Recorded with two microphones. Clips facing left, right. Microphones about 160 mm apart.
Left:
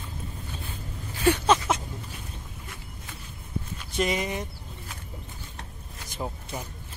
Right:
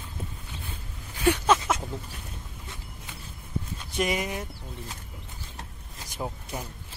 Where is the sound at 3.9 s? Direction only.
10° right (ahead or behind).